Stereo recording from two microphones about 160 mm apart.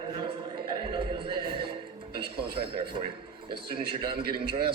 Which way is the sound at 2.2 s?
85° right.